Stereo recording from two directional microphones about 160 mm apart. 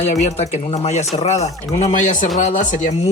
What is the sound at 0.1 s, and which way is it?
Speech, 45° left (ahead or behind).